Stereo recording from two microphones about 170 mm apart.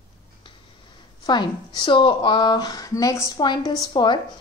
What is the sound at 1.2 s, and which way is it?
Speech, 25° left (ahead or behind).